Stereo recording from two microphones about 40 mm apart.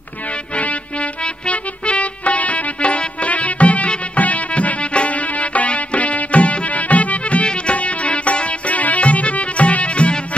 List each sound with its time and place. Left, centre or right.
0.6 s music: left